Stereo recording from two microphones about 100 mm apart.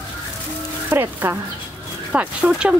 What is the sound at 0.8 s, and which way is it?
Speech, 20° right (ahead or behind).